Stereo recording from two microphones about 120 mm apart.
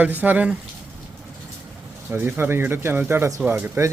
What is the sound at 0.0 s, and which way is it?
Speech, 15° right (ahead or behind).